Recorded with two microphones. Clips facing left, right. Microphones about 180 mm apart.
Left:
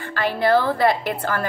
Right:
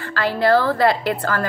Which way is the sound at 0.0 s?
15° left (ahead or behind).